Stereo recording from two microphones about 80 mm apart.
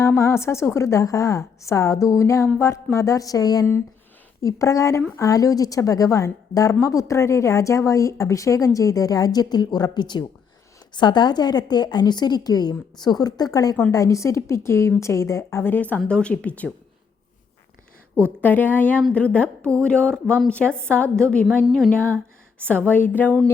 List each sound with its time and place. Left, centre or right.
0.0 s a woman's voice: left
16.0 s speech: centre
18.4 s speech: left
22.0 s a sound: right
22.6 s speech: centre